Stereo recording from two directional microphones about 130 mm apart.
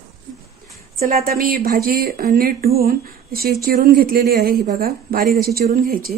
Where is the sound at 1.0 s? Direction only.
90° right.